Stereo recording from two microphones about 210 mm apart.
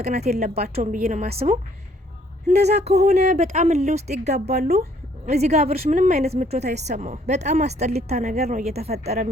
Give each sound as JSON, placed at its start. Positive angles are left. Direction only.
{"t": 0.0, "sound": "a woman's voice", "side_deg": -30}